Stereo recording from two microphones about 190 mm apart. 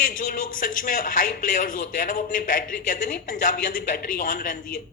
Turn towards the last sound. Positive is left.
turn(degrees=45)  # may be behind; listen again after turning